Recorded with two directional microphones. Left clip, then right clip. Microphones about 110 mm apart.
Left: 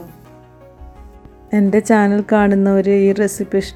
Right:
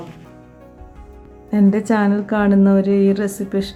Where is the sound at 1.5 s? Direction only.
60° left (ahead or behind).